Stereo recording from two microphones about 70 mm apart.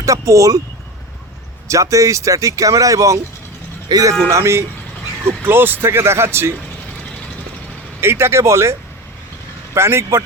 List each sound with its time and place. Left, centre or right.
0.0 s speech: right
1.6 s speech: right
3.8 s speech: right
4.3 s speech: right
5.2 s speech: right
8.0 s speech: right
9.7 s speech: right